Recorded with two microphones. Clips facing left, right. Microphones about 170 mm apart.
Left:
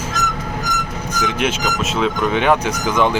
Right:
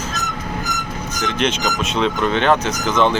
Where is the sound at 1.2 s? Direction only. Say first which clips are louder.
Even; 10° left (ahead or behind).